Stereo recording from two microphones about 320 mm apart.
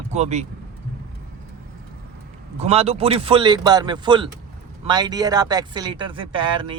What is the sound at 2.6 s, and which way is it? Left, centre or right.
Speech, centre.